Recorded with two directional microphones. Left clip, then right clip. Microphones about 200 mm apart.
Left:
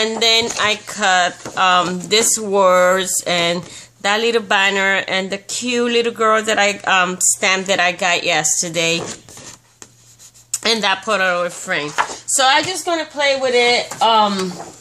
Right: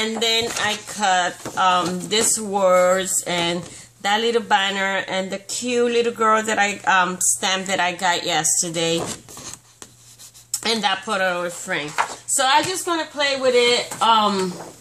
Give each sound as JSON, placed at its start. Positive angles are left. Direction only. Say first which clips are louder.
{"t": 0.2, "sound": "speech", "louder": "left 6 dB", "side_deg": 40}
{"t": 10.5, "sound": "speech", "louder": "left 4 dB", "side_deg": 35}